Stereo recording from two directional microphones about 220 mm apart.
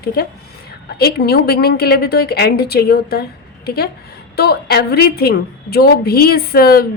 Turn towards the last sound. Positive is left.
turn(degrees=45)  # may be behind; listen again after turning